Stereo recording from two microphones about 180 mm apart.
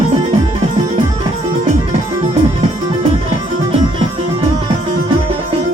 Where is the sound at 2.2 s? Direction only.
30° right (ahead or behind).